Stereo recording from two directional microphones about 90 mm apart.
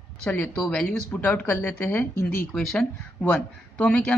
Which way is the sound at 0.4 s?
20° left (ahead or behind).